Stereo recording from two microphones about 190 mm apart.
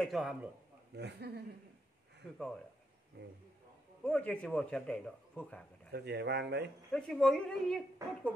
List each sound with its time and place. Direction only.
0.0 s speech: centre (ahead or behind)
0.9 s speech: 60° right (ahead or behind)
4.0 s speech: 5° left (ahead or behind)
5.9 s speech: 60° right (ahead or behind)
6.9 s speech: 5° left (ahead or behind)